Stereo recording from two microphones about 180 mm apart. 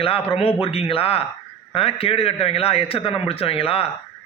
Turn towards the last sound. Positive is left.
turn(degrees=30)  # may be behind; listen again after turning